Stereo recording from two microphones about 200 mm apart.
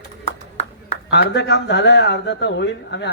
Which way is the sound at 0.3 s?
30° left (ahead or behind).